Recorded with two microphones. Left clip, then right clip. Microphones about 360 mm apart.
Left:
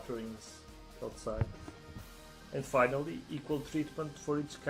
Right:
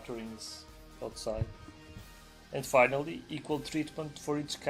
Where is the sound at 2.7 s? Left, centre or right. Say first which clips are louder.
Right 4 dB; right.